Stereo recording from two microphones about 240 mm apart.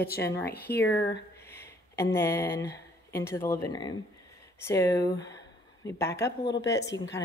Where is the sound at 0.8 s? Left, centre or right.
Centre.